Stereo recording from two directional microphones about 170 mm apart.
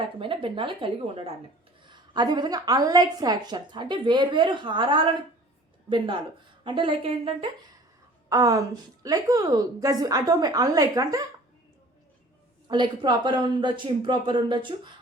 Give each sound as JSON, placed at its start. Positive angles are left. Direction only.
{"t": 0.0, "sound": "a woman's voice", "side_deg": -30}
{"t": 8.3, "sound": "a woman's voice", "side_deg": -20}
{"t": 12.6, "sound": "a woman's voice", "side_deg": -25}